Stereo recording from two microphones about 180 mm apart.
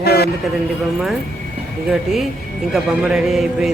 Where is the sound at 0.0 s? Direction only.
60° left (ahead or behind).